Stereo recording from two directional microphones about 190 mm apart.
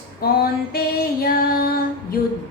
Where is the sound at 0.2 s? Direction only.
50° left (ahead or behind).